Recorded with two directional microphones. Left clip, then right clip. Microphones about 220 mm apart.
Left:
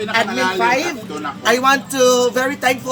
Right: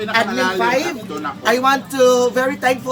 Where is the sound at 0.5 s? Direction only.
5° left (ahead or behind).